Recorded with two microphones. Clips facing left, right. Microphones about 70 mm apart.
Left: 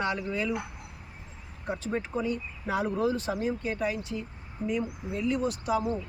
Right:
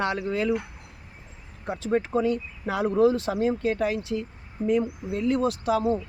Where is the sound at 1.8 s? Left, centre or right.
Right.